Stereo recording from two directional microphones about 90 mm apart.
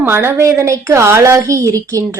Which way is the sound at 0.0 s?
25° right (ahead or behind).